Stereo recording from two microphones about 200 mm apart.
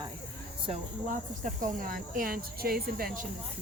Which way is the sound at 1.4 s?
40° right (ahead or behind).